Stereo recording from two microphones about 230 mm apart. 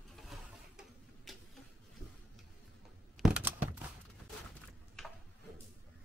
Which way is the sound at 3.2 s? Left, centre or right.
Centre.